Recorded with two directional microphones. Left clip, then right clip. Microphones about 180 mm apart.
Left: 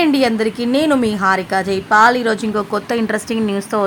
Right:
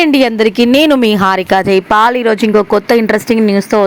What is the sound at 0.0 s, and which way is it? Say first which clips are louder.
A woman's voice: right 5 dB; 40° right (ahead or behind).